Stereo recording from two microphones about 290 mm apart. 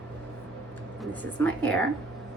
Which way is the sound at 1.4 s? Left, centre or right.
Centre.